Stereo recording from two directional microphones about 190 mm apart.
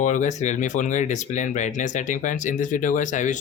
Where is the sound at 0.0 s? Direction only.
40° left (ahead or behind).